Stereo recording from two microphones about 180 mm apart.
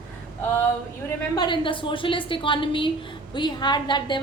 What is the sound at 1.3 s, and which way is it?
A woman's voice, 25° left (ahead or behind).